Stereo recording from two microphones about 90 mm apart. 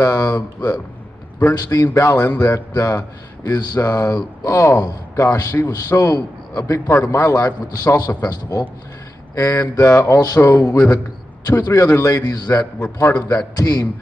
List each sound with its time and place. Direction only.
0.0 s a man's voice: 45° left (ahead or behind)